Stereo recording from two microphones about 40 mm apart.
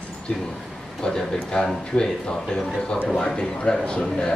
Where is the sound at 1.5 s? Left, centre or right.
Left.